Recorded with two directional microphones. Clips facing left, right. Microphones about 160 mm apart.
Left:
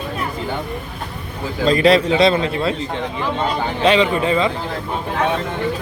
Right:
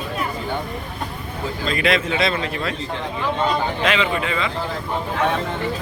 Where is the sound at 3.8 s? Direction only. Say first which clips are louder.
Left 6 dB; 35° left (ahead or behind).